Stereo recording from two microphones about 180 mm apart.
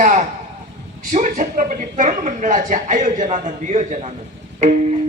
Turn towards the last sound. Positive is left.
turn(degrees=-45)  # may be behind; listen again after turning